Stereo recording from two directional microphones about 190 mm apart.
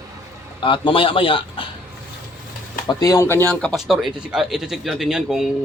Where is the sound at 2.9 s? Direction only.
20° left (ahead or behind); by 5.4 s centre (ahead or behind).